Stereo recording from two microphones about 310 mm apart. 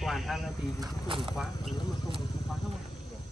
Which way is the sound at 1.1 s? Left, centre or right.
Centre.